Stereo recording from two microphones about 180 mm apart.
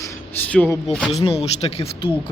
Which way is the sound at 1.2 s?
35° left (ahead or behind).